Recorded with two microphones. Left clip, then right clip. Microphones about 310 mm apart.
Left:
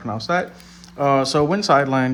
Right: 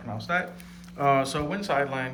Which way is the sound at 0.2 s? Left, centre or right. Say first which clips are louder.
Left 5 dB; centre.